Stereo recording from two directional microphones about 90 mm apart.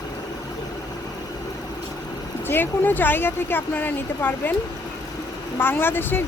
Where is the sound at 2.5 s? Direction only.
20° left (ahead or behind).